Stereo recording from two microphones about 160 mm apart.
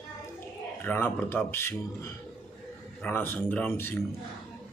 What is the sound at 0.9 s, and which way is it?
A man's voice, 10° left (ahead or behind).